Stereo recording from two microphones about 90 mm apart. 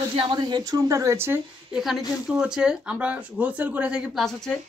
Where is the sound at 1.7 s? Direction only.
5° right (ahead or behind).